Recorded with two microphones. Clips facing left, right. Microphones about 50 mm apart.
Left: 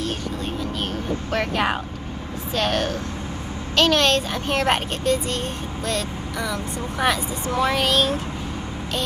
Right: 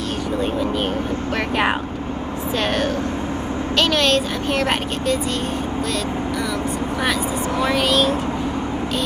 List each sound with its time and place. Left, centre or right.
1.3 s speech: centre
3.7 s speech: centre
7.0 s speech: centre